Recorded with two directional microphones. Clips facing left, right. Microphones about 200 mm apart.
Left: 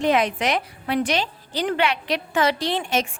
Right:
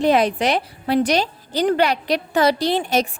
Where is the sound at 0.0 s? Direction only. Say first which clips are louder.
Right 4 dB; 35° right (ahead or behind).